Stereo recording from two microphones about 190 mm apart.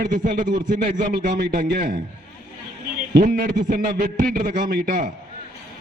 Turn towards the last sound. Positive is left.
turn(degrees=-45)  # may be behind; listen again after turning